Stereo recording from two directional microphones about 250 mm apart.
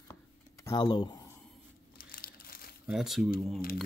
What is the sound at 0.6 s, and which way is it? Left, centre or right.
Speech, centre.